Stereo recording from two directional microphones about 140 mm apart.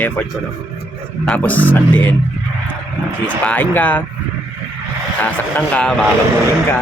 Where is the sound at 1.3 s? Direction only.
10° left (ahead or behind).